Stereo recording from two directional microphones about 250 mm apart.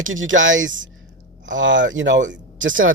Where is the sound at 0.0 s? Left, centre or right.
Right.